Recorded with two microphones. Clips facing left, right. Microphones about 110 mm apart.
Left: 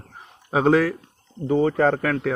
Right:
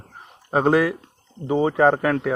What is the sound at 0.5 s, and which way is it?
Speech, centre (ahead or behind).